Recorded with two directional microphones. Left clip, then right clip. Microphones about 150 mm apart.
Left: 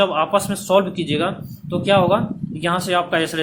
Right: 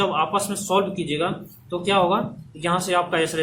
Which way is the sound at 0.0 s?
45° left (ahead or behind).